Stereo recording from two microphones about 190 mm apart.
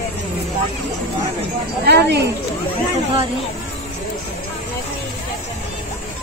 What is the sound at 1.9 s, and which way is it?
Speech, 60° right (ahead or behind).